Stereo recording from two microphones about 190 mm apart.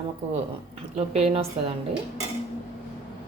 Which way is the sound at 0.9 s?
35° right (ahead or behind).